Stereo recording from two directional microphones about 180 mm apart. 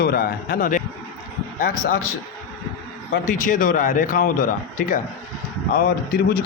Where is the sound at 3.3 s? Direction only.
45° left (ahead or behind).